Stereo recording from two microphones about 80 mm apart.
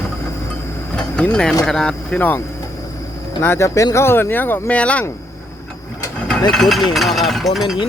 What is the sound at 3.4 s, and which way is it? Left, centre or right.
Speech, left.